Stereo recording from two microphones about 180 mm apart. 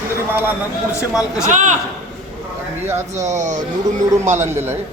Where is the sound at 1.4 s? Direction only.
40° right (ahead or behind).